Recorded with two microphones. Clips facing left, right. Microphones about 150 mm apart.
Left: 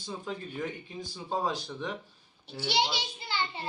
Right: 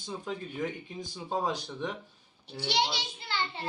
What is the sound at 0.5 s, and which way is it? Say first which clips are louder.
Speech: right 1 dB; 20° right (ahead or behind).